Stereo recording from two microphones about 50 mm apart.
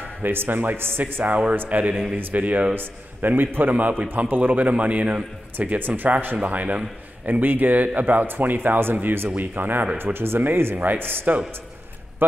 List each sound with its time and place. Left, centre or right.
0.2 s speech: right
1.2 s a man's voice: right
6.3 s a man's voice: right